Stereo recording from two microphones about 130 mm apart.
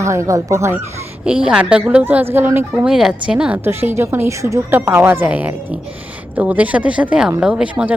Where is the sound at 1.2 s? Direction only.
5° right (ahead or behind).